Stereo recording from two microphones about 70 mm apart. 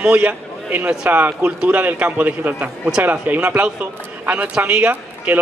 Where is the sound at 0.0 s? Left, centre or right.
Right.